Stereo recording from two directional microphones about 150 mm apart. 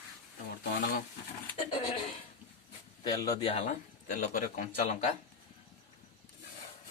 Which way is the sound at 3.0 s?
25° left (ahead or behind).